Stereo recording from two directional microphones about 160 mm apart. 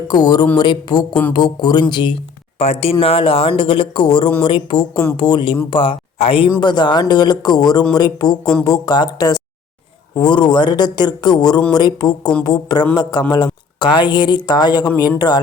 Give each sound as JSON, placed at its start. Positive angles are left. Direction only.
{"t": 0.1, "sound": "speech", "side_deg": 25}